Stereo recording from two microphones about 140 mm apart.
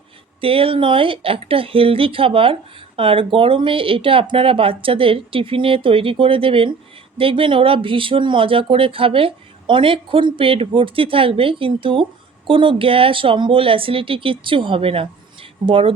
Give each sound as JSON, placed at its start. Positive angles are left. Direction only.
{"t": 0.4, "sound": "speech", "side_deg": -40}